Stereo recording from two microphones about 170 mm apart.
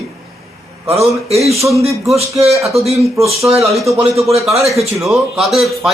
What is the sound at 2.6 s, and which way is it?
Speech, 15° right (ahead or behind).